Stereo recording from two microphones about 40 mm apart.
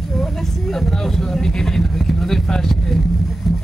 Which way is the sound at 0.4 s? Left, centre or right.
Centre.